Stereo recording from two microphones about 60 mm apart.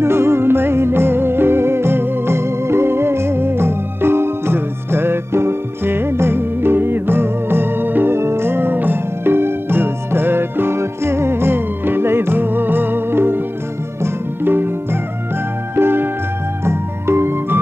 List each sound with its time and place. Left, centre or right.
0.0 s music: right
16.6 s organ: right